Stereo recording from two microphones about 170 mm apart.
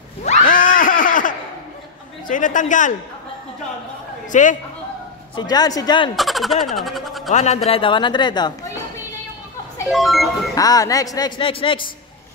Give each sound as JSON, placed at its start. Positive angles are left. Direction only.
{"t": 0.2, "sound": "screaming", "side_deg": 50}
{"t": 2.2, "sound": "a man's voice", "side_deg": 50}
{"t": 4.3, "sound": "a man's voice", "side_deg": 50}
{"t": 5.3, "sound": "speech", "side_deg": 25}
{"t": 6.1, "sound": "speech", "side_deg": 0}
{"t": 7.2, "sound": "speech", "side_deg": 40}
{"t": 9.8, "sound": "speech", "side_deg": 0}
{"t": 10.5, "sound": "speech", "side_deg": 20}